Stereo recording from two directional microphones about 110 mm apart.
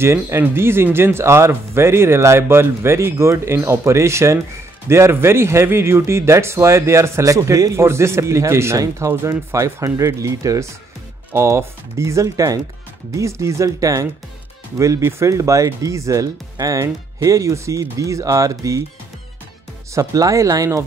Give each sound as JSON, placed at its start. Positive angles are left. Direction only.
{"t": 0.0, "sound": "speech", "side_deg": -25}
{"t": 19.9, "sound": "speech", "side_deg": -30}